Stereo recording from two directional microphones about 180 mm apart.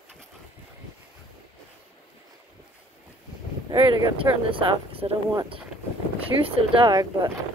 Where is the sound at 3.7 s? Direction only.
20° right (ahead or behind).